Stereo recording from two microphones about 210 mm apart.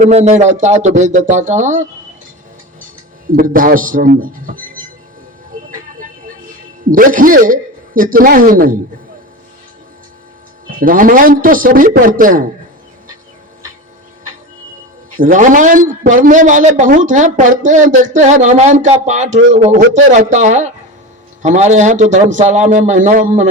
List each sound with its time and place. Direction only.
0.0 s a man's voice: 35° right (ahead or behind)
3.3 s a man's voice: 40° right (ahead or behind)
6.9 s a man's voice: 40° right (ahead or behind)
10.8 s a man's voice: 40° right (ahead or behind)
15.2 s a man's voice: 40° right (ahead or behind)